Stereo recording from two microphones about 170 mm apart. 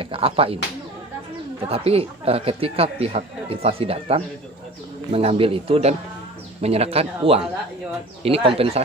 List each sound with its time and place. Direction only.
0.0 s speech: 35° right (ahead or behind)
1.7 s speech: 35° right (ahead or behind)